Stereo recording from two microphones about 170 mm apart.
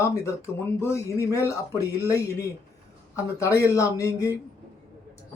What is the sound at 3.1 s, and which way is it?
Speech, 15° left (ahead or behind).